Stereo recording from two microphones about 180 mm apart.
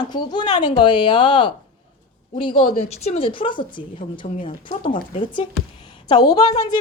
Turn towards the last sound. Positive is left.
turn(degrees=20)  # may be behind; listen again after turning